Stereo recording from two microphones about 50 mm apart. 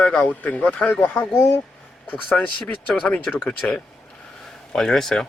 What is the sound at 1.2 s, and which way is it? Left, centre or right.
Speech, left.